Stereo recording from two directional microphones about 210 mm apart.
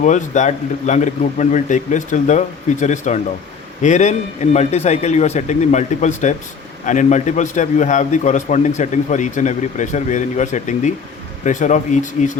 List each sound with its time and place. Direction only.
0.0 s a man's voice: 35° left (ahead or behind)